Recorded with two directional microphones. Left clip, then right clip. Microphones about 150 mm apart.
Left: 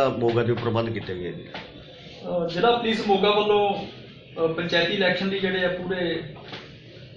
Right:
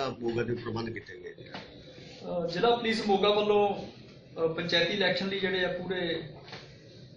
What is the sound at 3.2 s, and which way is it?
Speech, centre (ahead or behind).